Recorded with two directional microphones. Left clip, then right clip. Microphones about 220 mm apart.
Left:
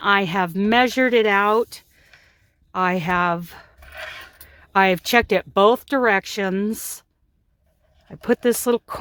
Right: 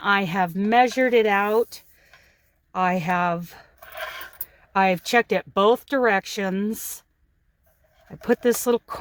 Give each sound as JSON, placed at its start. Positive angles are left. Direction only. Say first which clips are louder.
{"t": 0.0, "sound": "speech", "louder": "left 3 dB", "side_deg": 25}
{"t": 8.0, "sound": "speech", "louder": "left 1 dB", "side_deg": 20}